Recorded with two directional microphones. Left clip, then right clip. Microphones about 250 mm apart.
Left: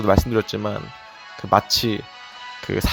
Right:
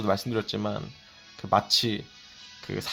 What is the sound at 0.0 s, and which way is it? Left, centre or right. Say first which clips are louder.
Speech: left 9 dB; left.